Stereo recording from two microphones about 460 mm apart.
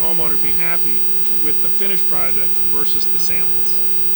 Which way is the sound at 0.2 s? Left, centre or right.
Left.